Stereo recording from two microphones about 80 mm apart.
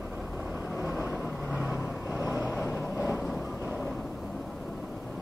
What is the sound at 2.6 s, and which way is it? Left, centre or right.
Vehicle, left.